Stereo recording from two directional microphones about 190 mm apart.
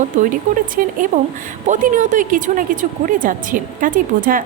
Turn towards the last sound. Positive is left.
turn(degrees=-45)  # may be behind; listen again after turning